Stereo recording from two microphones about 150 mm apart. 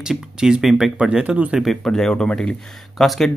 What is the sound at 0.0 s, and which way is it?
Speech, 5° right (ahead or behind).